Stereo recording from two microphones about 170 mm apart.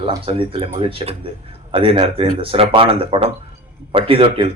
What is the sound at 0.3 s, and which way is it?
A man's voice, 30° right (ahead or behind).